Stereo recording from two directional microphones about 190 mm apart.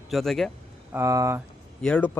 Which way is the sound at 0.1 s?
Centre (ahead or behind).